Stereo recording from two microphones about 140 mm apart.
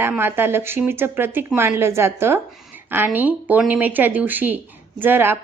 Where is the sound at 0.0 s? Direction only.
15° right (ahead or behind).